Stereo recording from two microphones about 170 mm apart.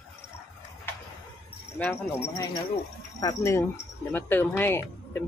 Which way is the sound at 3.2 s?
20° left (ahead or behind).